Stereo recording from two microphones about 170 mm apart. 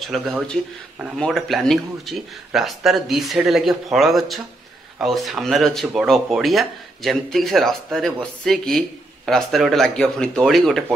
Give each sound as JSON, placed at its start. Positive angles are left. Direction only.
{"t": 0.0, "sound": "speech", "side_deg": 0}